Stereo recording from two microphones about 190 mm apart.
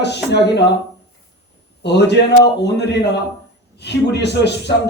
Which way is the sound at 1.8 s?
65° left (ahead or behind).